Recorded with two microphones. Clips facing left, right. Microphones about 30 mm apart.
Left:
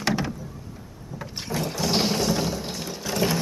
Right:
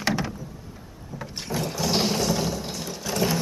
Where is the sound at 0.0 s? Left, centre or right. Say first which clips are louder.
Left 1 dB; centre.